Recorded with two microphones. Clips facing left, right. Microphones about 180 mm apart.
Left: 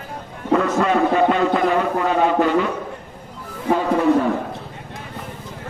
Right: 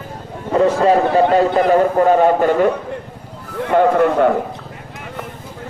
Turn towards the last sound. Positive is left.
turn(degrees=-65)  # may be behind; listen again after turning